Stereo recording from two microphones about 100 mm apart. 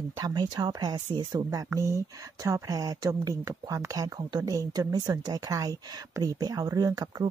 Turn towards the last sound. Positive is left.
turn(degrees=-40)  # may be behind; listen again after turning